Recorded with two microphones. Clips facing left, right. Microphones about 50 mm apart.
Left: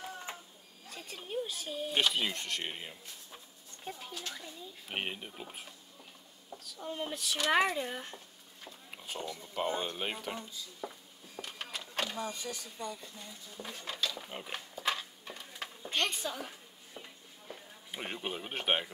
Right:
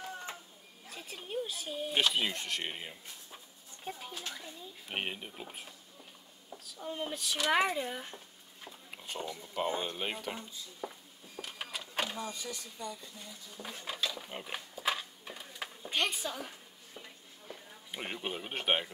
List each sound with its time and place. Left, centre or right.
0.3 s a sound: centre
0.8 s speech: centre
4.8 s speech: centre
8.6 s a sound: centre
9.2 s speech: centre
11.4 s printer: centre
12.2 s speech: left
13.6 s speech: centre
14.1 s a sound: centre
17.5 s speech: centre